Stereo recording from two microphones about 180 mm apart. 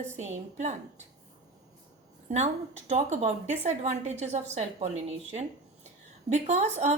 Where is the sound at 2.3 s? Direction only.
40° right (ahead or behind).